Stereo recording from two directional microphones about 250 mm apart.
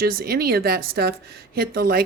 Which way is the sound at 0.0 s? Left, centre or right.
Right.